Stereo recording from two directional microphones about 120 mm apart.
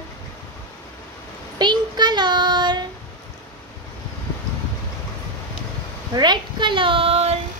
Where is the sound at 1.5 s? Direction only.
35° right (ahead or behind).